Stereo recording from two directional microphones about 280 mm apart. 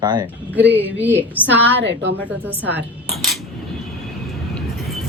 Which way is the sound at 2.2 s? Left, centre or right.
Centre.